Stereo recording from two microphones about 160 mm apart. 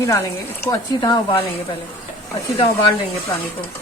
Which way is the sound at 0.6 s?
25° left (ahead or behind).